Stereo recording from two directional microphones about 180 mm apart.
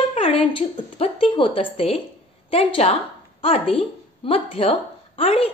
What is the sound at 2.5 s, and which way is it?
A woman's voice, 35° left (ahead or behind).